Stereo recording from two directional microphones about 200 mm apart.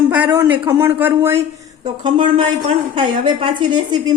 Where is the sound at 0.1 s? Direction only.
10° right (ahead or behind).